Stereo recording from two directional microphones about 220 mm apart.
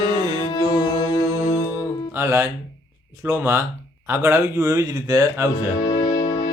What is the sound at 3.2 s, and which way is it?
A man's voice, 15° right (ahead or behind).